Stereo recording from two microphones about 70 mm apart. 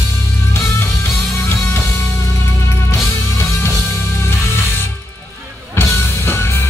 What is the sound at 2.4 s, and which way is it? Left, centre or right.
Music, left.